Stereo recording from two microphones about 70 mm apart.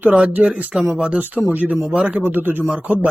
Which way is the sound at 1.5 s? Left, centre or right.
Right.